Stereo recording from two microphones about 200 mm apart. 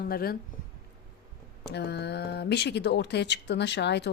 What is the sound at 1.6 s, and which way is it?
Speech, 55° left (ahead or behind).